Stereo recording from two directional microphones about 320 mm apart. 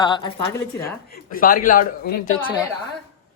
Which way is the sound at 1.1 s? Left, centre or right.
Left.